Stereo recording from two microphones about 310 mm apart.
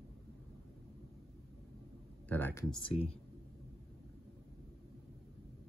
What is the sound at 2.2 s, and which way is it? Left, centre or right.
Speech, centre.